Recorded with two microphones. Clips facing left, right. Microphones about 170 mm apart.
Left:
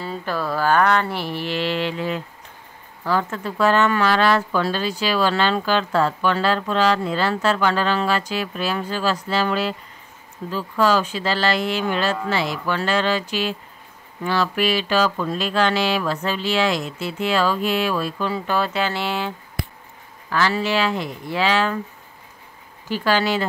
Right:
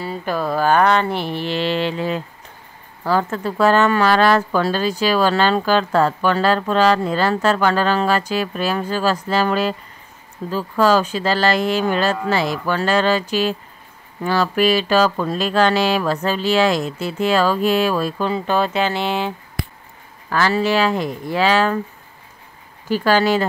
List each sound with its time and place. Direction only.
0.0 s speech: 10° right (ahead or behind); by 18.3 s 40° right (ahead or behind)
18.3 s speech: 20° right (ahead or behind)
20.2 s speech: 45° right (ahead or behind)
22.8 s speech: 45° right (ahead or behind)